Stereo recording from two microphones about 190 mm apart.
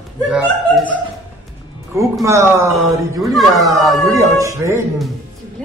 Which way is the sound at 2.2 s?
15° right (ahead or behind).